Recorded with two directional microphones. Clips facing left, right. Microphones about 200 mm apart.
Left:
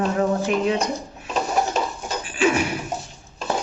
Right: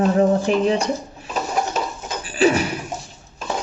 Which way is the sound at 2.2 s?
35° right (ahead or behind).